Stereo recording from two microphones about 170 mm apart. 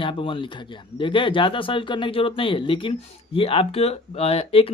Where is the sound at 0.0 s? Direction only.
30° left (ahead or behind).